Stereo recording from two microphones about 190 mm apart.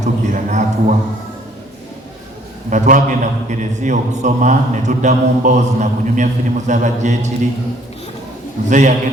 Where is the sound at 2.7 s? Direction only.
40° right (ahead or behind).